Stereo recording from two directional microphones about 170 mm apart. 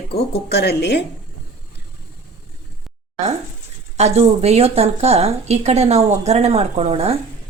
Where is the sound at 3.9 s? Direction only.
40° right (ahead or behind).